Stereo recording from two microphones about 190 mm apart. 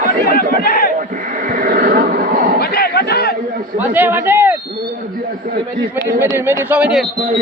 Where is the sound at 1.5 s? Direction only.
45° right (ahead or behind).